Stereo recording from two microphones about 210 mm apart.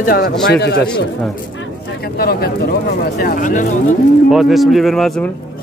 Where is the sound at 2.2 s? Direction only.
45° left (ahead or behind).